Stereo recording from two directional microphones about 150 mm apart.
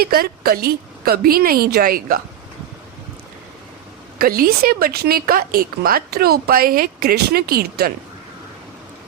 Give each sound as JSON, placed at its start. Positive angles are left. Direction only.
{"t": 0.0, "sound": "a woman's voice", "side_deg": -90}
{"t": 4.2, "sound": "a woman's voice", "side_deg": -85}